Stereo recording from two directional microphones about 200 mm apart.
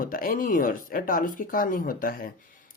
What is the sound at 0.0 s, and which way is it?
Speech, 45° left (ahead or behind).